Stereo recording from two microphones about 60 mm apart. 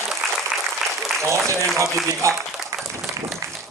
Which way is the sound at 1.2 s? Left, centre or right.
Right.